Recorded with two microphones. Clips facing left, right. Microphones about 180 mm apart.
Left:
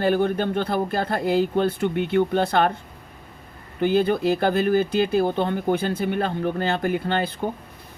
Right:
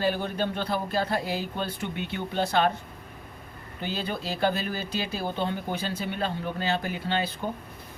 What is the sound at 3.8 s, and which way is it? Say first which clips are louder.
A man's voice: left 12 dB; 55° left (ahead or behind).